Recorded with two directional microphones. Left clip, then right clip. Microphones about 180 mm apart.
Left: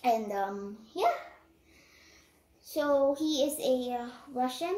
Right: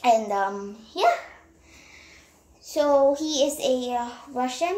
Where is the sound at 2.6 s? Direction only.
15° left (ahead or behind).